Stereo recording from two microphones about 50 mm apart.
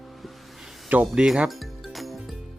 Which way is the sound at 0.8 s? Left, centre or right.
Right.